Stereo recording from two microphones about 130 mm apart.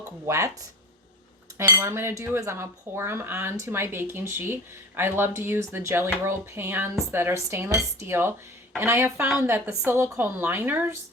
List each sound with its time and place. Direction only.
0.3 s cutlery: 25° right (ahead or behind)
1.5 s cutlery: 20° right (ahead or behind)
9.4 s a woman's voice: 20° right (ahead or behind)